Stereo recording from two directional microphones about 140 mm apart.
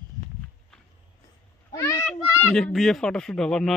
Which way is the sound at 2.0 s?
5° left (ahead or behind).